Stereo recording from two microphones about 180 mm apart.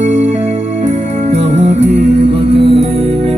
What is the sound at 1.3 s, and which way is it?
Music, 40° right (ahead or behind).